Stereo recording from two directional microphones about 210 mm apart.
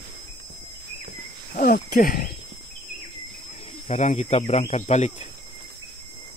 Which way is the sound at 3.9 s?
35° left (ahead or behind).